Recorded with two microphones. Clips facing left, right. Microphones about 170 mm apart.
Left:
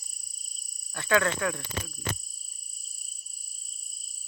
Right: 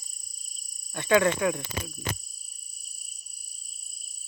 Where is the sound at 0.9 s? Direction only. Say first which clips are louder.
Right 4 dB; 20° right (ahead or behind).